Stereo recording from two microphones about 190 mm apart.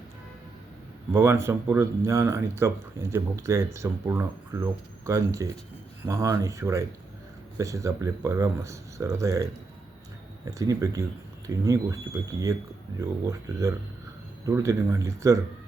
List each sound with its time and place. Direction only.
1.1 s speech: 15° right (ahead or behind)